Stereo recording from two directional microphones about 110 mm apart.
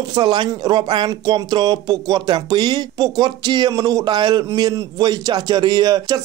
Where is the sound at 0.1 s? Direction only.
45° right (ahead or behind).